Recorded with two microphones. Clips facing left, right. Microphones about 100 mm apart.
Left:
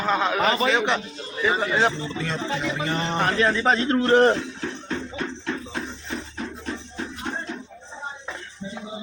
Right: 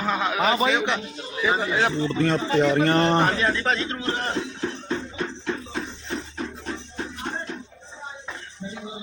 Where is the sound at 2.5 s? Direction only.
55° right (ahead or behind).